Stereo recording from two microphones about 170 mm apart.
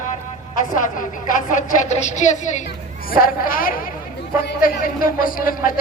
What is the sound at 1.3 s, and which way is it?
Music, 50° left (ahead or behind).